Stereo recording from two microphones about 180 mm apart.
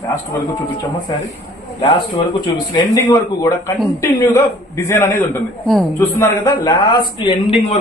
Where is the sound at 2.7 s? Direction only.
20° left (ahead or behind).